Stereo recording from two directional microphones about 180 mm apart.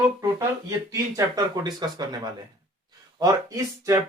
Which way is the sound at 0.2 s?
20° right (ahead or behind).